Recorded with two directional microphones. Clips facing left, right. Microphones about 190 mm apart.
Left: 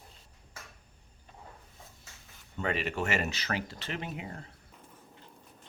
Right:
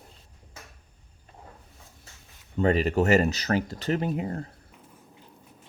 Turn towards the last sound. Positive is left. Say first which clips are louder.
# right 11 dB
turn(degrees=-40)  # may be behind; listen again after turning